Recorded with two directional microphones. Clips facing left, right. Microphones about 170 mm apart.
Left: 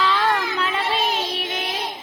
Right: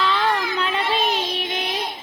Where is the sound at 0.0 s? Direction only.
Centre (ahead or behind).